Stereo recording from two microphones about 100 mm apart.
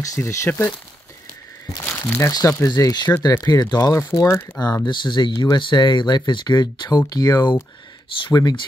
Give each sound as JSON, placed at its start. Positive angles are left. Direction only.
{"t": 0.0, "sound": "speech", "side_deg": 30}
{"t": 0.5, "sound": "speech", "side_deg": 20}
{"t": 1.9, "sound": "crumpling", "side_deg": 20}
{"t": 2.3, "sound": "speech", "side_deg": 40}
{"t": 3.2, "sound": "speech", "side_deg": 25}
{"t": 3.4, "sound": "speech", "side_deg": 40}
{"t": 4.5, "sound": "speech", "side_deg": 45}